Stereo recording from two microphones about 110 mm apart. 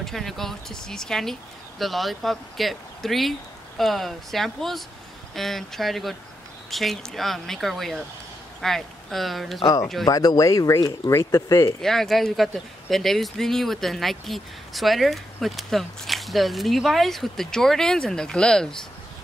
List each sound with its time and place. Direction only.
0.0 s speech: centre (ahead or behind)
9.6 s speech: 35° left (ahead or behind)
11.8 s speech: 5° left (ahead or behind)